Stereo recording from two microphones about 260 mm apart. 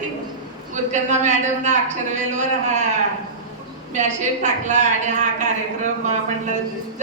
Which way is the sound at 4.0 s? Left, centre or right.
Right.